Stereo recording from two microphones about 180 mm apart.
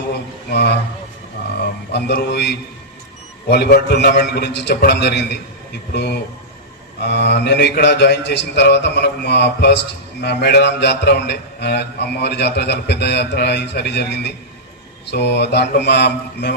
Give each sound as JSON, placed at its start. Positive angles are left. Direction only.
{"t": 0.1, "sound": "a sound", "side_deg": 65}
{"t": 1.6, "sound": "a man's voice", "side_deg": 65}
{"t": 3.5, "sound": "a man's voice", "side_deg": 60}